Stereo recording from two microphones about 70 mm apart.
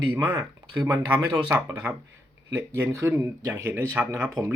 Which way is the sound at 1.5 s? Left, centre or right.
Right.